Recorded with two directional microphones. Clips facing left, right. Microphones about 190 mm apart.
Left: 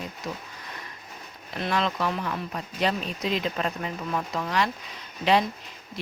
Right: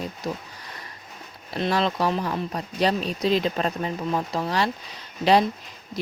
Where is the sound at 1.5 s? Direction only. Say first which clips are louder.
Right 3 dB; 35° right (ahead or behind).